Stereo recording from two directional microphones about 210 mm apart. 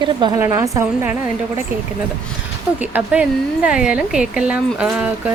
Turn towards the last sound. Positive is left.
turn(degrees=-5)  # may be behind; listen again after turning